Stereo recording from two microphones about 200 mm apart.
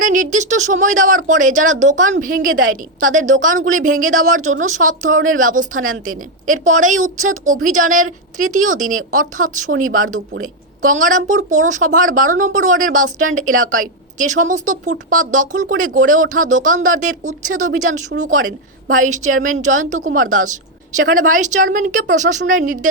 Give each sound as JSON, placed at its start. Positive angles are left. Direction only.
{"t": 0.0, "sound": "speech", "side_deg": -40}
{"t": 4.4, "sound": "speech", "side_deg": -90}
{"t": 4.8, "sound": "a woman's voice", "side_deg": -40}